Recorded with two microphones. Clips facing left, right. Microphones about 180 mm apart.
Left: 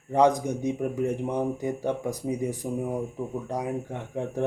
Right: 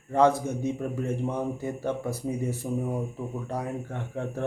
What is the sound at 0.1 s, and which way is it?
Speech, 15° left (ahead or behind).